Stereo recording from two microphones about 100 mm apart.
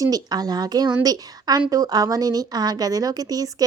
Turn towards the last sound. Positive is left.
turn(degrees=-40)  # may be behind; listen again after turning